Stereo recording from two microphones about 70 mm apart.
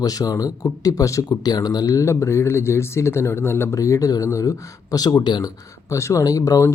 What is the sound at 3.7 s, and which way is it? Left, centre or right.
Speech, left.